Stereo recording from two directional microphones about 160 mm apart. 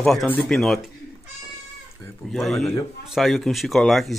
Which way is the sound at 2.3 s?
Centre (ahead or behind).